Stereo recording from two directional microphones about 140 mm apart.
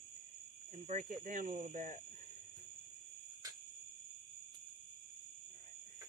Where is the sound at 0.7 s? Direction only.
60° right (ahead or behind).